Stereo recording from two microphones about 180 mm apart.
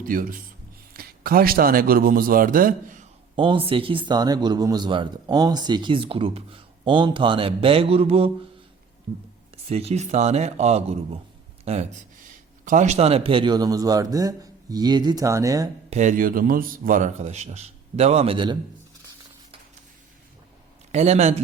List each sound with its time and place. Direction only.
0.0 s a man's voice: 50° right (ahead or behind)
3.3 s a man's voice: 30° right (ahead or behind)
9.6 s a man's voice: 35° right (ahead or behind); by 15.7 s 20° right (ahead or behind)
15.9 s a man's voice: 45° right (ahead or behind)
20.9 s a man's voice: 40° right (ahead or behind)